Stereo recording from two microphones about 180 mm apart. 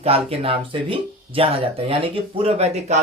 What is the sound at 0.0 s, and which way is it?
Speech, 35° right (ahead or behind).